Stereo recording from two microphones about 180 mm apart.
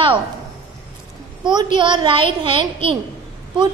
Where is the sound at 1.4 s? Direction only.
25° right (ahead or behind).